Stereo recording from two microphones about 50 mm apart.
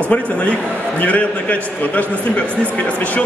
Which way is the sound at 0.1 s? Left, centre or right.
Left.